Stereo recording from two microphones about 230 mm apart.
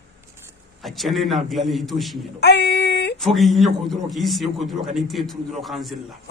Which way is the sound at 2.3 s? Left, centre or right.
Left.